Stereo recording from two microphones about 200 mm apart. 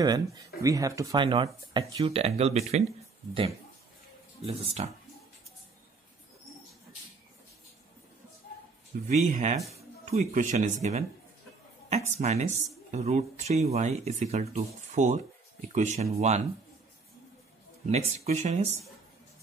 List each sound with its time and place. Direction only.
0.0 s speech: 20° right (ahead or behind)
4.5 s speech: 30° right (ahead or behind)
9.0 s speech: 40° right (ahead or behind)
17.8 s speech: 35° right (ahead or behind)